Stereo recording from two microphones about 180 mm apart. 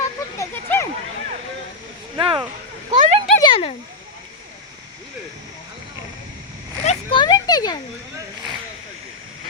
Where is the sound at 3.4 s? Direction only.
30° left (ahead or behind).